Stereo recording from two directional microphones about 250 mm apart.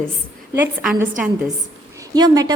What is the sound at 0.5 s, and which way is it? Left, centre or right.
Speech, centre.